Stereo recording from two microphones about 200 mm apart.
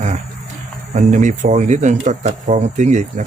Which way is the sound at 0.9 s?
40° right (ahead or behind).